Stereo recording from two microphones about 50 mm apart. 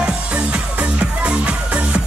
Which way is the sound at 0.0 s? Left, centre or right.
Right.